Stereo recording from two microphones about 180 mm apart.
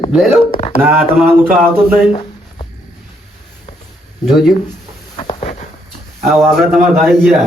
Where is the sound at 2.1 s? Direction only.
30° left (ahead or behind).